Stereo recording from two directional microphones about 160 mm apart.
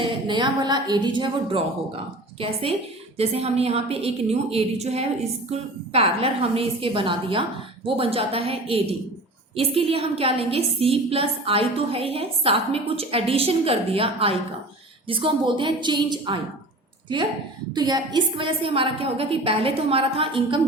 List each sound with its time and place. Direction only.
0.0 s a woman's voice: 30° right (ahead or behind)
17.7 s a woman's voice: 25° right (ahead or behind)